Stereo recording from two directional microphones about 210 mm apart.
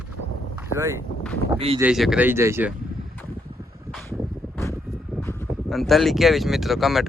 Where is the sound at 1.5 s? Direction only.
25° right (ahead or behind).